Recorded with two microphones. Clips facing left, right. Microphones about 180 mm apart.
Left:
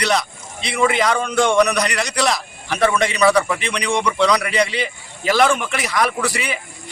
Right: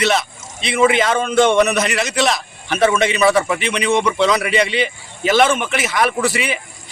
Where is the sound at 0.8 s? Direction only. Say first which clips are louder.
Right 3 dB; centre (ahead or behind).